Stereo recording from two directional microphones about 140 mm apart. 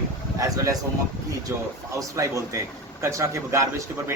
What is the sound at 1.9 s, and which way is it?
Speech, 25° right (ahead or behind).